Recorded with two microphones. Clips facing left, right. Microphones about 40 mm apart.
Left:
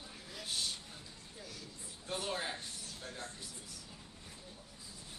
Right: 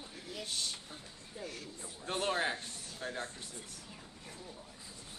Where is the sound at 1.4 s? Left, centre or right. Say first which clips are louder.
Right 6 dB; right.